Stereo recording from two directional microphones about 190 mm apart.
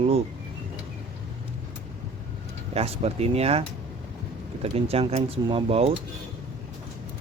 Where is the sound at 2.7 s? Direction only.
30° right (ahead or behind).